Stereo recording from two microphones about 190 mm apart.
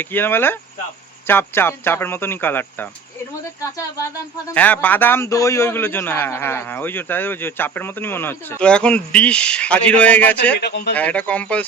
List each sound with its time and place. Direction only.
0.0 s speech: 10° left (ahead or behind)
10.7 s speech: 60° left (ahead or behind)
10.9 s speech: 5° left (ahead or behind)